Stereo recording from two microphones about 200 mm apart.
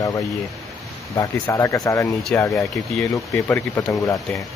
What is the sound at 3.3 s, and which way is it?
Speech, 15° left (ahead or behind).